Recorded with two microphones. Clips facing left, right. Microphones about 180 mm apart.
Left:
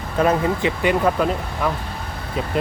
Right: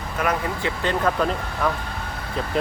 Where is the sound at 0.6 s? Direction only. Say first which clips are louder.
Left 5 dB; 15° left (ahead or behind).